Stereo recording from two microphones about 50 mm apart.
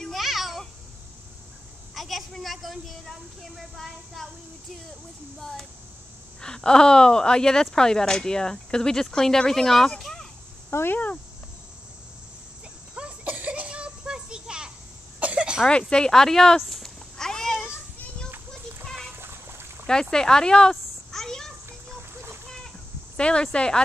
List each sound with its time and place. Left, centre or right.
0.0 s babbling: centre
2.0 s a woman's voice: centre
5.4 s speech: centre
10.7 s speech: left
12.9 s children playing: right
15.1 s cough: right
15.9 s speech: centre
17.2 s cat: centre
19.1 s splash: right
19.9 s speech: centre
20.7 s a sound: centre
23.1 s speech: centre